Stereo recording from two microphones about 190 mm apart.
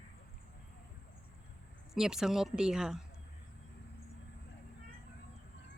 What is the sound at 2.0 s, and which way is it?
Speech, 5° right (ahead or behind).